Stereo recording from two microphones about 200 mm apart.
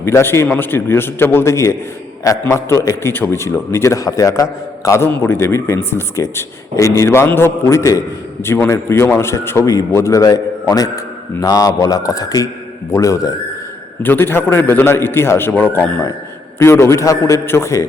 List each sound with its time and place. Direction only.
0.0 s a man's voice: 10° left (ahead or behind)